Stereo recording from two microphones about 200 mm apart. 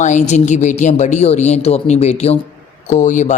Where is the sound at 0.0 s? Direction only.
35° left (ahead or behind).